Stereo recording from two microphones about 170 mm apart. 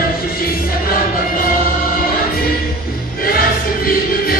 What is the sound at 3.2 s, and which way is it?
Music, 60° left (ahead or behind).